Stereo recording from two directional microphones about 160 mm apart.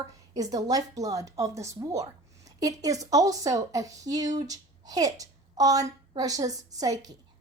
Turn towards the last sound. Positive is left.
turn(degrees=-25)  # may be behind; listen again after turning